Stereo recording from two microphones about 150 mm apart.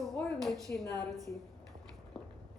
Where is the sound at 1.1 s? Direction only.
25° right (ahead or behind).